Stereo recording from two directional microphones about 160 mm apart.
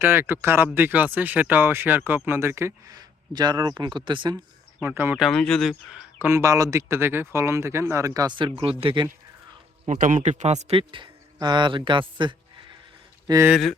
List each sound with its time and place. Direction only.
0.0 s speech: 15° right (ahead or behind); by 4.4 s 30° right (ahead or behind)
4.8 s speech: 10° right (ahead or behind); by 9.0 s 30° right (ahead or behind)
9.8 s a man's voice: 50° right (ahead or behind); by 13.5 s 20° right (ahead or behind)
13.5 s speech: centre (ahead or behind)